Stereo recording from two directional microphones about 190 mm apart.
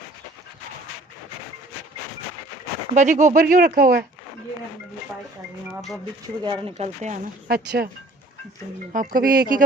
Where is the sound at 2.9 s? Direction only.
40° right (ahead or behind).